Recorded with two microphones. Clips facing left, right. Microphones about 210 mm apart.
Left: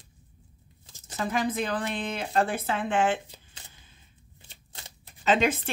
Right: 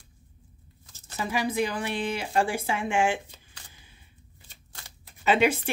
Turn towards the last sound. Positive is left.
turn(degrees=-10)  # may be behind; listen again after turning